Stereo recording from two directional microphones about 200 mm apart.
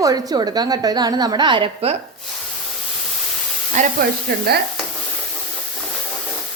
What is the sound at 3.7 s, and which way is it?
Speech, 40° right (ahead or behind).